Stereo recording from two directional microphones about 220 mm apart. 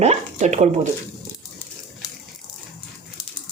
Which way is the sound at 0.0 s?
30° right (ahead or behind).